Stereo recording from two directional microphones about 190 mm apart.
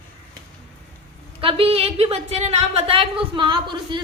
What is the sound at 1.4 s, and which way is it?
A woman's voice, 30° right (ahead or behind).